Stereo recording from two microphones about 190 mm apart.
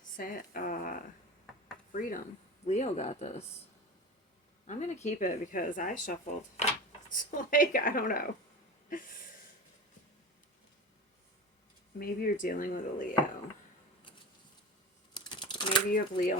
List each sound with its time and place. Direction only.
0.0 s speech: 45° left (ahead or behind)
4.6 s speech: 40° left (ahead or behind)
11.9 s speech: 50° left (ahead or behind)
15.1 s typing: 25° left (ahead or behind)
15.9 s speech: 50° left (ahead or behind)